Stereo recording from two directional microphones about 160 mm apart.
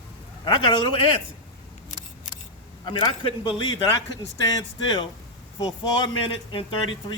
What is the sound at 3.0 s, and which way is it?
A man's voice, 35° left (ahead or behind).